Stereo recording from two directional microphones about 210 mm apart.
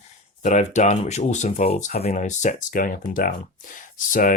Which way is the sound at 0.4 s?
35° left (ahead or behind).